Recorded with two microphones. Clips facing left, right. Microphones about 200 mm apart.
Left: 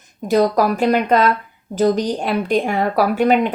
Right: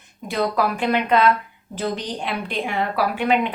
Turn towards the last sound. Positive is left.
turn(degrees=45)  # may be behind; listen again after turning